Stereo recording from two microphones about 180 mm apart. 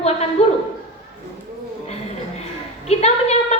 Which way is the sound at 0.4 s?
35° left (ahead or behind).